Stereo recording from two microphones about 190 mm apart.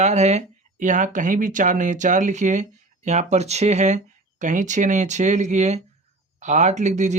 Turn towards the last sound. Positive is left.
turn(degrees=-40)  # may be behind; listen again after turning